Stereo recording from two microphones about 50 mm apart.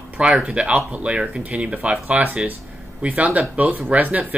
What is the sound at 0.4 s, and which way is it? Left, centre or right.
Speech, centre.